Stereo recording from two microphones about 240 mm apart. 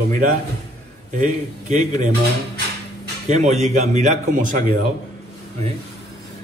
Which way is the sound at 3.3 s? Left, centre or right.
Right.